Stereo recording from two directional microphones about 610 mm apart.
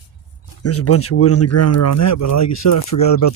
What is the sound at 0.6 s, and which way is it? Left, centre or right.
Speech, left.